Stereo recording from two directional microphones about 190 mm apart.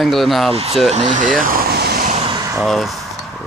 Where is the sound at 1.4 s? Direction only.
50° right (ahead or behind).